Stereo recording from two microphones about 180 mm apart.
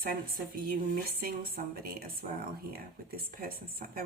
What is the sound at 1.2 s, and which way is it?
Speech, 55° right (ahead or behind).